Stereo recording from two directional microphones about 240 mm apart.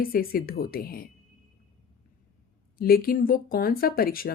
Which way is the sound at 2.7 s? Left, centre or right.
Left.